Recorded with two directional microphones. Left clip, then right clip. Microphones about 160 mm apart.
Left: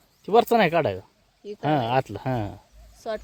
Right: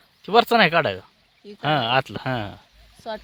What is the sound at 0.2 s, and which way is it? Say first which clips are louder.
Speech: right 2 dB; 10° left (ahead or behind).